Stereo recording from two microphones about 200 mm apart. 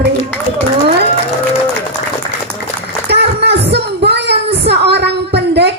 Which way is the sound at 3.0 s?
55° right (ahead or behind).